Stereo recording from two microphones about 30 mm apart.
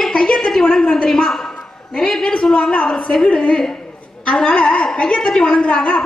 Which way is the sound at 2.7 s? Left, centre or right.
Left.